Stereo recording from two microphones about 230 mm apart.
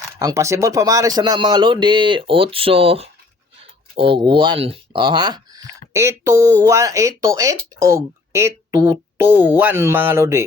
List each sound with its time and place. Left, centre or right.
0.2 s speech: centre